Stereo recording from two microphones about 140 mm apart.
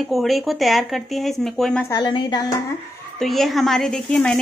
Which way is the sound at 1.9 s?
35° left (ahead or behind).